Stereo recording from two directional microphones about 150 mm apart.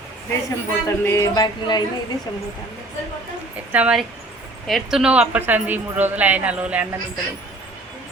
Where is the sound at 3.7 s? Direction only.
10° right (ahead or behind).